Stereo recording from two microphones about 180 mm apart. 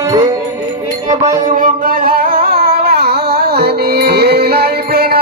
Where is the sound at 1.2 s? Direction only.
40° right (ahead or behind).